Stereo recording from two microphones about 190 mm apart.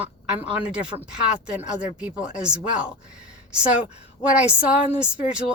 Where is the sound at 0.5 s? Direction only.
5° right (ahead or behind).